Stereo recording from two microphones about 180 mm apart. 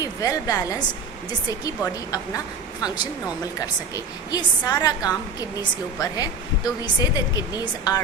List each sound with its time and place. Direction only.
0.0 s a woman's voice: 20° left (ahead or behind)